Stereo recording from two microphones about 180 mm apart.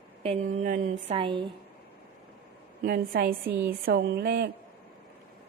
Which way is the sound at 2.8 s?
55° right (ahead or behind).